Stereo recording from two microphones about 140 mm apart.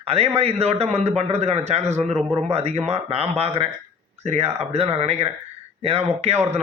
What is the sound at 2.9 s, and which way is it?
Speech, 45° right (ahead or behind).